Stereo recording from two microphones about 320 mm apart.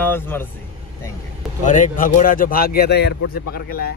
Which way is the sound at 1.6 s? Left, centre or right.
Left.